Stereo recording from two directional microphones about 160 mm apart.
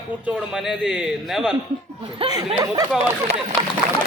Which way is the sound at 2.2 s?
25° right (ahead or behind).